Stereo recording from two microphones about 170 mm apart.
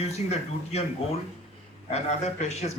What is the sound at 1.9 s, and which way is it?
Speech, 40° left (ahead or behind).